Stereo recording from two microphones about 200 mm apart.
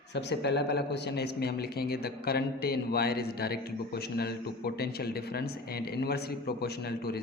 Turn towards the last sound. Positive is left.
turn(degrees=50)  # may be behind; listen again after turning